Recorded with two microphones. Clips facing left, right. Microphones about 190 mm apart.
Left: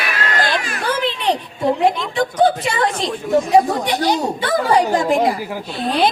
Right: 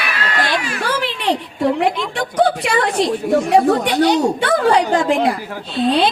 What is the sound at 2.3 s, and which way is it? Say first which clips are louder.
A woman's voice: right 2 dB; 70° right (ahead or behind).